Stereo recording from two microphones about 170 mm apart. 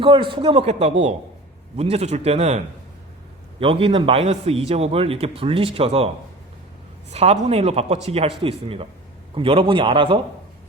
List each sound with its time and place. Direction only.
0.0 s a man's voice: 30° right (ahead or behind)
7.1 s a man's voice: 40° right (ahead or behind)